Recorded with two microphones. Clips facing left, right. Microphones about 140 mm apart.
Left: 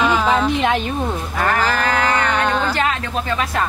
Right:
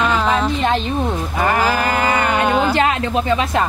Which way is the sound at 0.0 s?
5° left (ahead or behind).